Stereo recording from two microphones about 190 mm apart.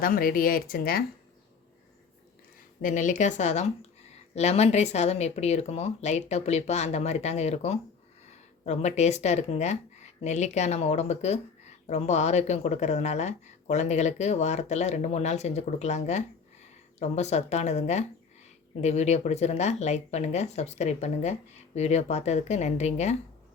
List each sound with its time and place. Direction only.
0.0 s speech: 50° left (ahead or behind)
2.8 s speech: 40° left (ahead or behind)